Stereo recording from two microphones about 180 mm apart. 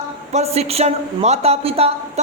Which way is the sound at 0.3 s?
35° right (ahead or behind).